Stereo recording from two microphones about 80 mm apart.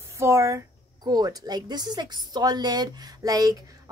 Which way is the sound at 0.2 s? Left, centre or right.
Right.